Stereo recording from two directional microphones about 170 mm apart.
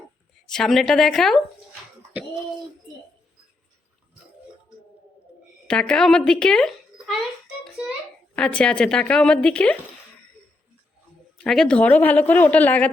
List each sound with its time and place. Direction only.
0.4 s speech: 5° left (ahead or behind)
5.6 s speech: 5° left (ahead or behind)
11.4 s a woman's voice: 5° left (ahead or behind)